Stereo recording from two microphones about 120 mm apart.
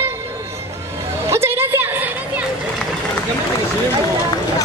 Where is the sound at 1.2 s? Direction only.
20° right (ahead or behind).